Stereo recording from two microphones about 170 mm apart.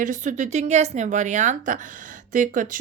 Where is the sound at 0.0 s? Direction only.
50° right (ahead or behind).